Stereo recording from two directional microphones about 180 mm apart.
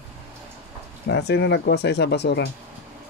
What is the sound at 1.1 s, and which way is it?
Speech, 70° left (ahead or behind).